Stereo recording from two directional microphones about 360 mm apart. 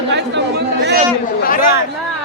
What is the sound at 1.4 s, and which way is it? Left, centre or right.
Chatter, left.